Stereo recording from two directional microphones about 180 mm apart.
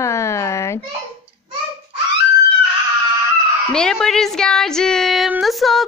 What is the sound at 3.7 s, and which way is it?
A woman's voice, 5° left (ahead or behind).